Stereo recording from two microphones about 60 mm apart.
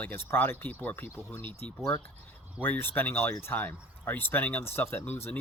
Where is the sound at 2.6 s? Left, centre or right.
Left.